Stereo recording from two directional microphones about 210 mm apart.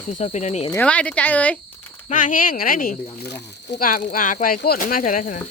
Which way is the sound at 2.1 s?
40° left (ahead or behind).